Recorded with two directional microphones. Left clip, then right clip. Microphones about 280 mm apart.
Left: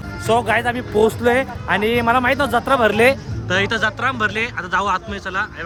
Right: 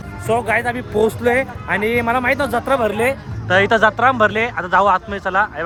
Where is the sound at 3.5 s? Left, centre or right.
Centre.